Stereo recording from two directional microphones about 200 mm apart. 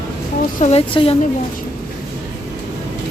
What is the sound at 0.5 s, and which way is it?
Speech, 30° left (ahead or behind).